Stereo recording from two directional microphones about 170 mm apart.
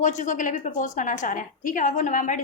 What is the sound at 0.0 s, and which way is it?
A woman's voice, 45° left (ahead or behind).